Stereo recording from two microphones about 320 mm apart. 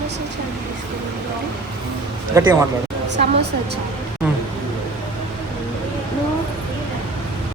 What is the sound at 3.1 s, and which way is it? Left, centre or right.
Speech, right.